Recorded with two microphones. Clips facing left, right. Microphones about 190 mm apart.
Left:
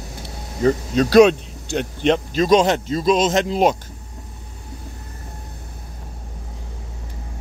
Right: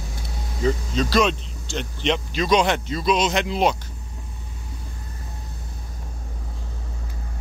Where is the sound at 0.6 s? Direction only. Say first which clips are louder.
Left 5 dB; 60° left (ahead or behind); by 3.7 s 45° left (ahead or behind).